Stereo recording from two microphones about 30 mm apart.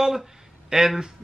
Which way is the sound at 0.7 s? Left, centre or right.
Right.